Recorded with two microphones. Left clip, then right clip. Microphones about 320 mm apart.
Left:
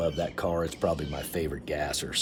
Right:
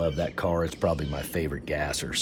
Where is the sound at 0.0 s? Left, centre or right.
Centre.